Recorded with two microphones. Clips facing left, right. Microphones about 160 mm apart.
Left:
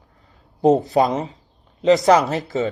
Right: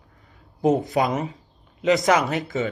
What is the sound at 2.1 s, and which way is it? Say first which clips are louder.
Speech: left 5 dB; 35° left (ahead or behind).